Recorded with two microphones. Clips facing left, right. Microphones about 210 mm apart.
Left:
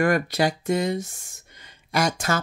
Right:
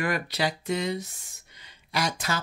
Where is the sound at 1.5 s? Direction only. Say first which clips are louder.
Left 6 dB; 50° left (ahead or behind).